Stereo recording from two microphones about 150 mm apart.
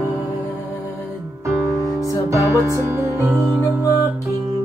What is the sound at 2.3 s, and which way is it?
Music, 20° right (ahead or behind).